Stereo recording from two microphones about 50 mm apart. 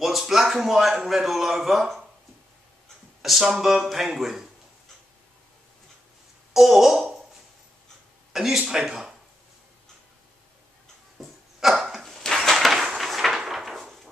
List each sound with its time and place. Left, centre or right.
0.0 s a man's voice: centre
3.2 s a man's voice: centre
6.5 s a man's voice: centre
8.3 s speech: centre
11.1 s dog: centre
12.3 s a sound: centre